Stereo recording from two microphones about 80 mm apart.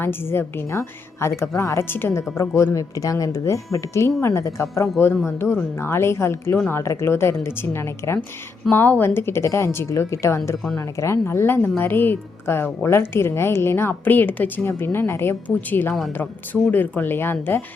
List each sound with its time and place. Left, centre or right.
0.0 s a woman's voice: left